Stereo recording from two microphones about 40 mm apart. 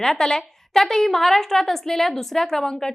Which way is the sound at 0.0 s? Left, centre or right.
Centre.